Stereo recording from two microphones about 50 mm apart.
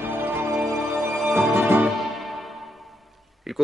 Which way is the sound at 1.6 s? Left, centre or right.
Right.